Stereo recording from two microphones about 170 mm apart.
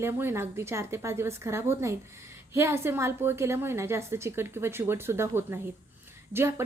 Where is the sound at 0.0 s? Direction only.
15° right (ahead or behind).